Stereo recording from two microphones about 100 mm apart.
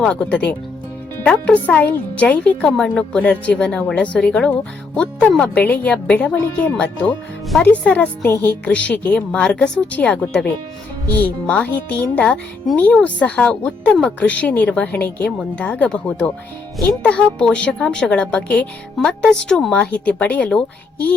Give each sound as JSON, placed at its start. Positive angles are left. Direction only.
{"t": 0.0, "sound": "speech", "side_deg": 10}
{"t": 11.4, "sound": "speech", "side_deg": 15}
{"t": 16.7, "sound": "speech", "side_deg": 0}